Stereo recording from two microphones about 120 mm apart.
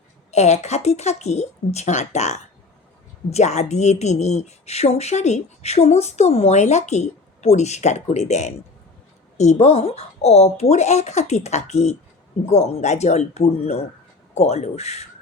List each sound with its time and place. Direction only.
0.3 s speech: 70° left (ahead or behind)